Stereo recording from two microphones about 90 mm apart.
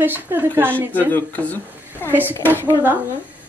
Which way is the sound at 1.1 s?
20° left (ahead or behind).